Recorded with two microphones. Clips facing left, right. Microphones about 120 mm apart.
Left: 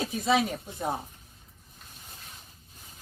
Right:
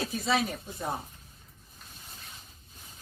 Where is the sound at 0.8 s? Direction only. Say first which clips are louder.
Left 3 dB; 20° left (ahead or behind).